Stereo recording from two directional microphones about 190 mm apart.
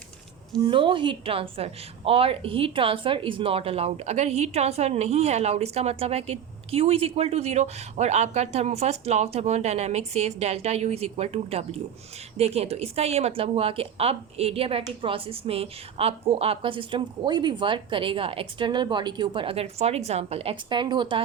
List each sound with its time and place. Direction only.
0.5 s a woman's voice: 25° right (ahead or behind)